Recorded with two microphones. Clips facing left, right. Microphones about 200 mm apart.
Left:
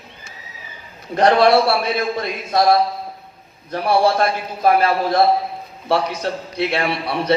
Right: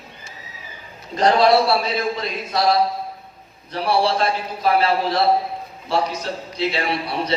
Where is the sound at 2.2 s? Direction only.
50° left (ahead or behind).